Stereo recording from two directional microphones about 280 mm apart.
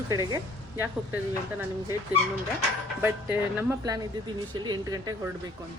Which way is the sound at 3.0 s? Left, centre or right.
Centre.